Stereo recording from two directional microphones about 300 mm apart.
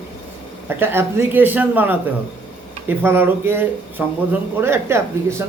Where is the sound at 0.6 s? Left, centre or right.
Centre.